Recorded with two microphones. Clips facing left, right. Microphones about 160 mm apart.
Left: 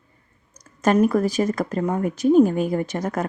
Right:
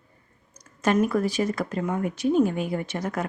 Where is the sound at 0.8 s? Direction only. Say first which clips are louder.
Left 4 dB; 40° left (ahead or behind).